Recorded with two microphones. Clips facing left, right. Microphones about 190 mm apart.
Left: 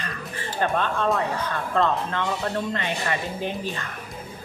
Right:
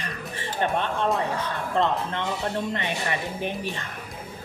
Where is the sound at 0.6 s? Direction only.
25° right (ahead or behind).